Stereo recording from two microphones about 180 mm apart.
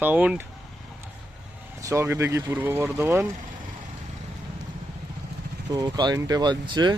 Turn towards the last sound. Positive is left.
turn(degrees=-25)  # may be behind; listen again after turning